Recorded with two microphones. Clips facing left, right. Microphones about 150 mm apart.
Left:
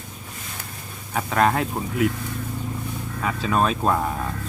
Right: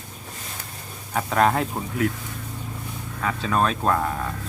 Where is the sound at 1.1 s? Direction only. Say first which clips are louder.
Even; centre (ahead or behind).